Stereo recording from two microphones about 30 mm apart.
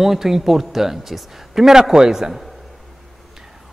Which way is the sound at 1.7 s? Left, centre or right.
Right.